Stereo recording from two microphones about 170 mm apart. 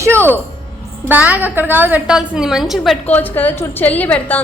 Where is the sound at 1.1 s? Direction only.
10° right (ahead or behind).